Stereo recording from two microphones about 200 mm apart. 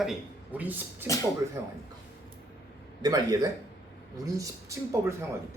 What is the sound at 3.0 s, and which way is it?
Speech, 20° right (ahead or behind).